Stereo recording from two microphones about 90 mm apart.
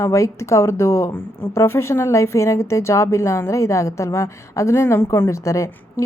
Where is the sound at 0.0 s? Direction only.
35° left (ahead or behind).